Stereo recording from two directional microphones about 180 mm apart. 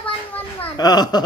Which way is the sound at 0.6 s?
20° left (ahead or behind).